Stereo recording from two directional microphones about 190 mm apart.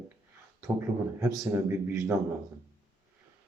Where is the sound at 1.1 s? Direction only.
15° right (ahead or behind).